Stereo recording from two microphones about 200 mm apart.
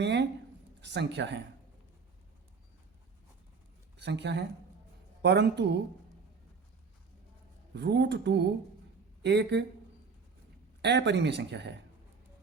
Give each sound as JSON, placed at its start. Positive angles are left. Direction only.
{"t": 0.0, "sound": "speech", "side_deg": -60}
{"t": 3.9, "sound": "a woman's voice", "side_deg": -60}
{"t": 7.8, "sound": "speech", "side_deg": -60}
{"t": 10.8, "sound": "speech", "side_deg": -60}